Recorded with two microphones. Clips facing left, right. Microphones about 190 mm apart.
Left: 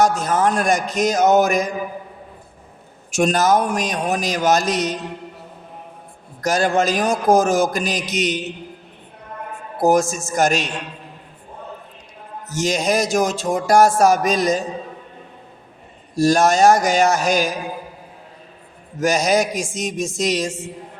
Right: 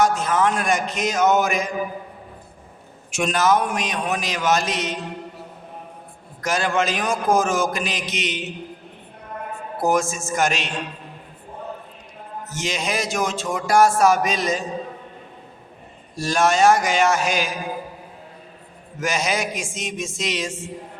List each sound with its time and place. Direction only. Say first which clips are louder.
0.0 s speech: left 2 dB; 40° left (ahead or behind)
3.1 s speech: left 3 dB; 40° left (ahead or behind)
6.4 s speech: left 4 dB; 40° left (ahead or behind)
9.8 s speech: left 5 dB; 40° left (ahead or behind)
12.5 s speech: left 7 dB; 40° left (ahead or behind)
16.1 s speech: left 5 dB; 40° left (ahead or behind)
18.9 s speech: left 7 dB; 40° left (ahead or behind)